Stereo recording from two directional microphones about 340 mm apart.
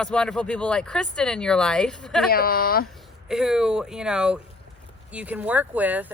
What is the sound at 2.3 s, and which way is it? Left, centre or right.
Speech, left.